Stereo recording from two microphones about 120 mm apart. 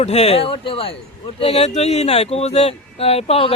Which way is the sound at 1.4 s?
60° left (ahead or behind).